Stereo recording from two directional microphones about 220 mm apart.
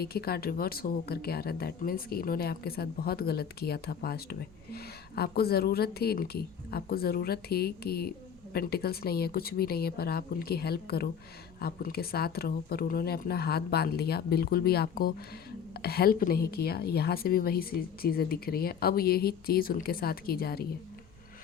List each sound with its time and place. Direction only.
0.0 s speech: 45° left (ahead or behind)